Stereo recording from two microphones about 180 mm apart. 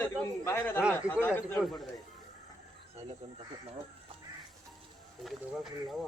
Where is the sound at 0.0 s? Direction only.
10° left (ahead or behind).